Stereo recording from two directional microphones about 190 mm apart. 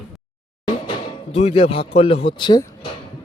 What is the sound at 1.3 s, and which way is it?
A man's voice, 35° left (ahead or behind).